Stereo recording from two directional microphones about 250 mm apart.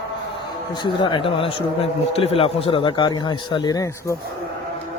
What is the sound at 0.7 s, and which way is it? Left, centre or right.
A man's voice, centre.